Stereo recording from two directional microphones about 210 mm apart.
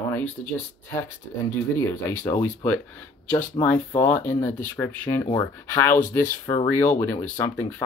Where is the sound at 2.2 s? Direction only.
10° left (ahead or behind).